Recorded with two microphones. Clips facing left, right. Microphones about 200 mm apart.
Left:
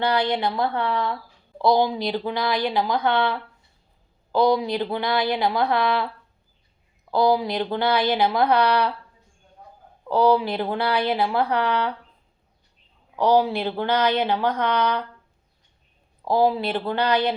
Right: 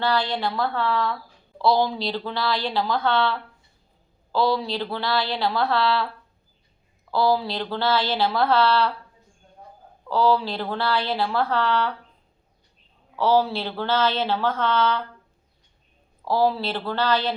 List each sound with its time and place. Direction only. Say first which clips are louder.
0.0 s a woman's voice: left 2 dB; 20° left (ahead or behind)
7.1 s a woman's voice: left 2 dB; 15° left (ahead or behind)
10.1 s a woman's voice: left 2 dB; 20° left (ahead or behind)
13.1 s a woman's voice: left 2 dB; 15° left (ahead or behind)
16.2 s a woman's voice: left 2 dB; 15° left (ahead or behind)